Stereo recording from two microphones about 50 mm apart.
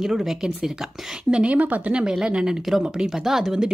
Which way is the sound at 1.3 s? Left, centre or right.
Right.